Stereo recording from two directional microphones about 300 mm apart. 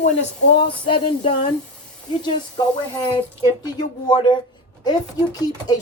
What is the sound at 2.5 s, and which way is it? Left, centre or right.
Speech, centre.